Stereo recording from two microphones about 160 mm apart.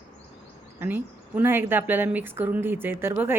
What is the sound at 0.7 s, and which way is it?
Speech, 10° right (ahead or behind).